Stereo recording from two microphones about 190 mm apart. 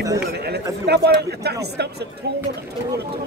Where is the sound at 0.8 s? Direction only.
60° right (ahead or behind).